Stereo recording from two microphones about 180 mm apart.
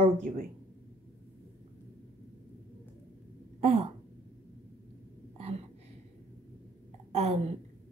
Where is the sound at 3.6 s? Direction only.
35° right (ahead or behind).